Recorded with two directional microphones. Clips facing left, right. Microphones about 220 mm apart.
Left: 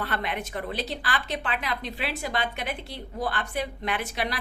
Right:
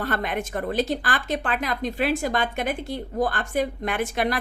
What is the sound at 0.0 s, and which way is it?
Speech, 45° right (ahead or behind).